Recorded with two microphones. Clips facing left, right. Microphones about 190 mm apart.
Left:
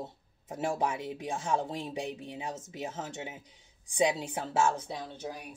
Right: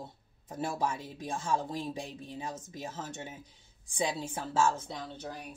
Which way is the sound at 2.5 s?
75° left (ahead or behind).